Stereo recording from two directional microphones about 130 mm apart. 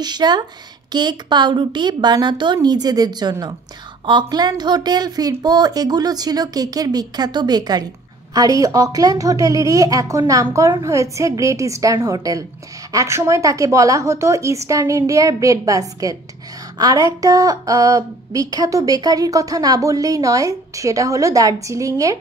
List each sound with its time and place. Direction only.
0.0 s a woman's voice: 35° right (ahead or behind)